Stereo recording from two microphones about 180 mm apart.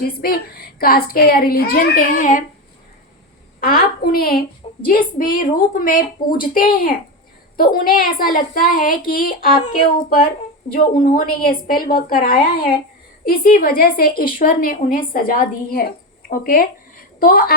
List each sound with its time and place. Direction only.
0.0 s speech: 55° left (ahead or behind)
3.6 s speech: 55° left (ahead or behind)
4.6 s a sound: 30° left (ahead or behind)
5.1 s a woman's voice: 50° left (ahead or behind)